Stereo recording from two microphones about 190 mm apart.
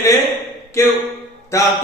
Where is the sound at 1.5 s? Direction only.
15° left (ahead or behind).